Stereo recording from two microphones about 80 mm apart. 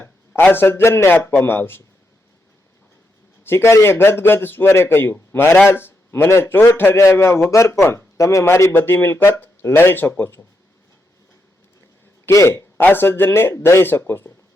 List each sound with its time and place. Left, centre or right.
0.4 s speech: left
3.4 s a man's voice: left
12.3 s speech: left